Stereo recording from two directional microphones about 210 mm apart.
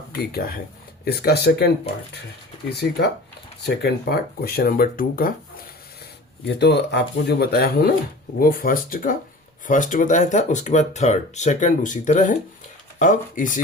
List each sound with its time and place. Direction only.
0.3 s speech: 45° left (ahead or behind)
3.6 s speech: 50° left (ahead or behind)
6.6 s speech: 55° left (ahead or behind); by 13.5 s 40° left (ahead or behind)